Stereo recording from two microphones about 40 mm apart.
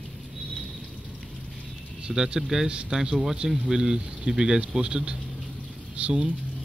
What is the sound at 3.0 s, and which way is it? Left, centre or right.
Speech, centre.